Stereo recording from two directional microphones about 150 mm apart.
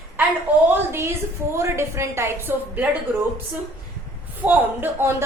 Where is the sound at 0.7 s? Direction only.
15° right (ahead or behind).